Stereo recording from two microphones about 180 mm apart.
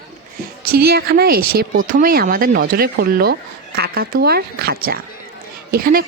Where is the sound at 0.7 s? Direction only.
60° right (ahead or behind).